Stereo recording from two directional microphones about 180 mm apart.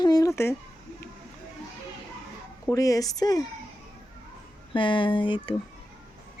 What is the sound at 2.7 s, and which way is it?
Speech, 20° left (ahead or behind).